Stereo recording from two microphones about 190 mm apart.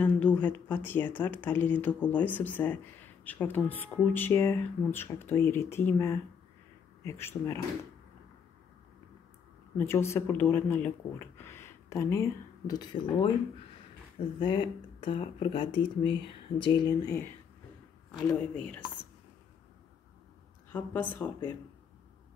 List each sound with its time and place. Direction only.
0.0 s speech: 5° left (ahead or behind)
9.8 s speech: 15° left (ahead or behind)
14.4 s speech: 25° left (ahead or behind)
18.2 s speech: 10° left (ahead or behind)
20.7 s speech: 10° left (ahead or behind)